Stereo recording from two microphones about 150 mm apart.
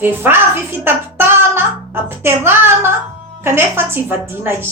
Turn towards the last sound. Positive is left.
turn(degrees=-15)  # may be behind; listen again after turning